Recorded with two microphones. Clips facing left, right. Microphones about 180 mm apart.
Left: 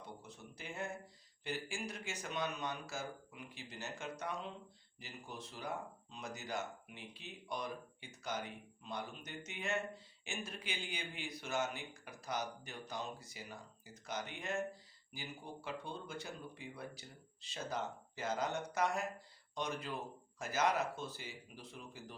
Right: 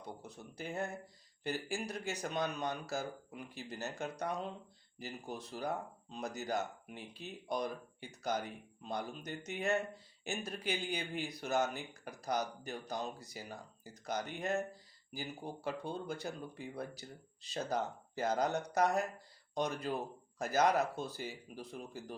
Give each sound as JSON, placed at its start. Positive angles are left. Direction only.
{"t": 0.0, "sound": "speech", "side_deg": -40}